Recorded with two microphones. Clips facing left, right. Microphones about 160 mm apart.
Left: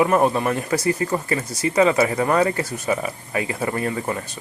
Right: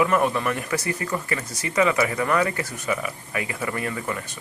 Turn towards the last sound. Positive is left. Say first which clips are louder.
# left 4 dB
turn(degrees=30)  # may be behind; listen again after turning